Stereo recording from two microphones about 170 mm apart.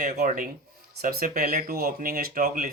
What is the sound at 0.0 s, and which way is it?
Speech, 45° right (ahead or behind).